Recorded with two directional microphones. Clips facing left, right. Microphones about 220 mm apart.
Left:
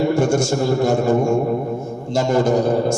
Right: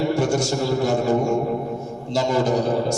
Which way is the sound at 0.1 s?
50° left (ahead or behind).